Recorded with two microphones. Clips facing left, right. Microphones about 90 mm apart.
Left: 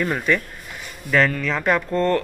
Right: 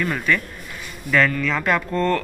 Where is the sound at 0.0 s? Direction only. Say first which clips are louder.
Left 1 dB; 30° left (ahead or behind).